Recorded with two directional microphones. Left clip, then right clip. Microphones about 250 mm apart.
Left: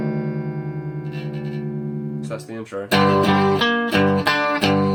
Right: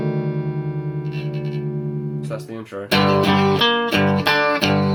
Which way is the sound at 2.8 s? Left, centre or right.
Right.